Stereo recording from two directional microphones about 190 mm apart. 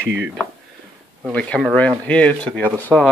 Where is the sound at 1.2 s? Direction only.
5° left (ahead or behind).